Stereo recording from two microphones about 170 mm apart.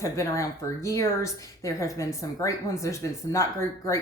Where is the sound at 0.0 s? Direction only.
20° left (ahead or behind).